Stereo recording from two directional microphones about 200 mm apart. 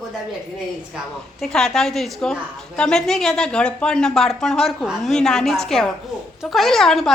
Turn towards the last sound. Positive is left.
turn(degrees=0)  # may be behind; listen again after turning